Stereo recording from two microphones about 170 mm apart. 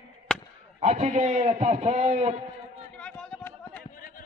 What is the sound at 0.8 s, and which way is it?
A man's voice, 40° right (ahead or behind).